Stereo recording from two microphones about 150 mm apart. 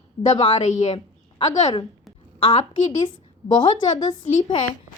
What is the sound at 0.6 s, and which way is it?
Speech, 50° left (ahead or behind).